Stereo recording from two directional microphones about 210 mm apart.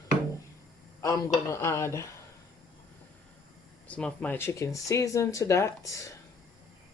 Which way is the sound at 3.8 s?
5° left (ahead or behind).